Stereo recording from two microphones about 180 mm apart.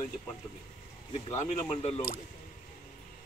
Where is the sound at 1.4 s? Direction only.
40° left (ahead or behind).